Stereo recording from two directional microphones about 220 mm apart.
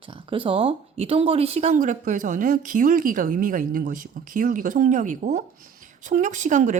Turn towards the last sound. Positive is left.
turn(degrees=-35)  # may be behind; listen again after turning